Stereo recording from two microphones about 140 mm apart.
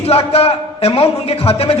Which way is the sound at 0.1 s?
45° left (ahead or behind).